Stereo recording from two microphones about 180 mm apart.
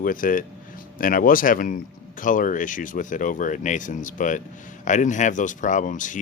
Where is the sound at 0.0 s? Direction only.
50° left (ahead or behind).